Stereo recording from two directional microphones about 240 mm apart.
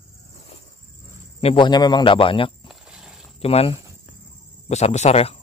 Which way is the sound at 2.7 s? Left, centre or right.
Centre.